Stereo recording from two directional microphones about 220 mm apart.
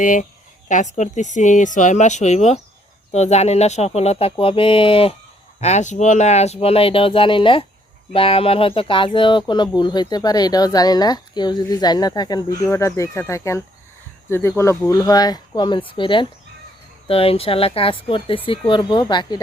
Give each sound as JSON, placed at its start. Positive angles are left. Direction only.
{"t": 0.0, "sound": "a woman's voice", "side_deg": 35}